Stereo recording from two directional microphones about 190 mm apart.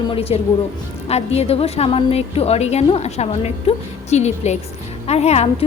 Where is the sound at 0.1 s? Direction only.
30° left (ahead or behind).